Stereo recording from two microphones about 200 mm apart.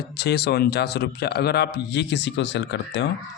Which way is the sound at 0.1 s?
55° left (ahead or behind).